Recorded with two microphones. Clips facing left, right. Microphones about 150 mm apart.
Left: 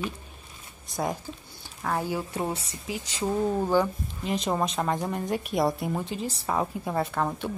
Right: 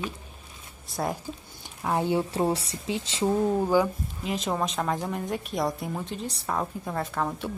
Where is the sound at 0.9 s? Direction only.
Centre (ahead or behind).